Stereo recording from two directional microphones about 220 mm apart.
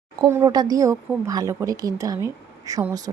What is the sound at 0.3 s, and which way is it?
A woman's voice, 15° right (ahead or behind).